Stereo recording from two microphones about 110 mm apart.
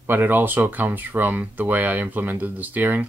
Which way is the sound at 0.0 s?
20° right (ahead or behind).